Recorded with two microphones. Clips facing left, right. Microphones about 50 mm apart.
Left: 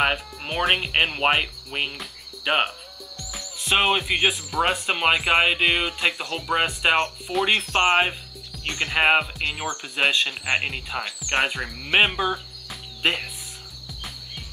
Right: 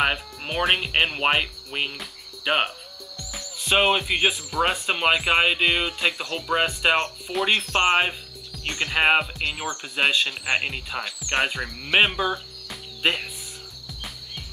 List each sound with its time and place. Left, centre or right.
0.0 s speech: centre
7.5 s speech: left
8.6 s speech: centre